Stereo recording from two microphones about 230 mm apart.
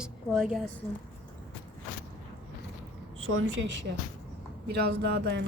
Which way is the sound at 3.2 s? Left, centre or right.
Right.